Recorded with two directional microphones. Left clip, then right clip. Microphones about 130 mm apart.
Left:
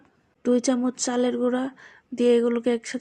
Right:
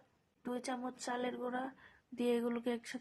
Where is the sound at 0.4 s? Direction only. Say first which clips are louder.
Left 18 dB; 30° left (ahead or behind).